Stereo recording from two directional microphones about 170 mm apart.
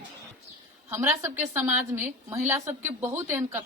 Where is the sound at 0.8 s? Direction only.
15° right (ahead or behind).